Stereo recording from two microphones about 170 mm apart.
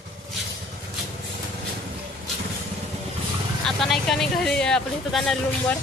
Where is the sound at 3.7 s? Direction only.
Centre (ahead or behind).